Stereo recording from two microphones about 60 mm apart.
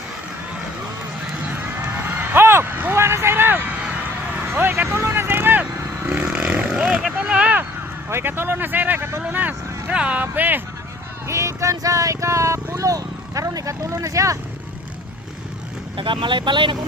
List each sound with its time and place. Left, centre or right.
1.5 s a sound: right
4.5 s vehicle: right
6.1 s a sound: right
8.1 s speech: right
9.3 s vehicle: right
9.9 s speech: centre
10.2 s music: right
11.3 s vehicle: right